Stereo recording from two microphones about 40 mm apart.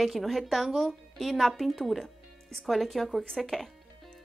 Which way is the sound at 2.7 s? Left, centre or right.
Centre.